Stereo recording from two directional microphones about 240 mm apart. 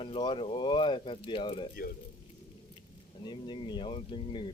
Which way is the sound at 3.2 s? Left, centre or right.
Centre.